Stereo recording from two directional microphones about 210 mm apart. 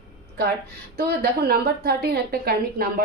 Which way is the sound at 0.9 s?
50° right (ahead or behind).